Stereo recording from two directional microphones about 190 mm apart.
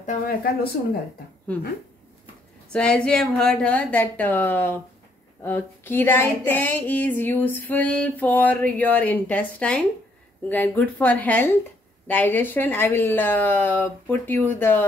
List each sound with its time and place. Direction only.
0.0 s speech: 45° left (ahead or behind)
2.7 s female singing: 5° left (ahead or behind)